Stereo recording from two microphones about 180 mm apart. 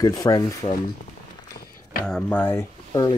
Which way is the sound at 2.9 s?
25° left (ahead or behind).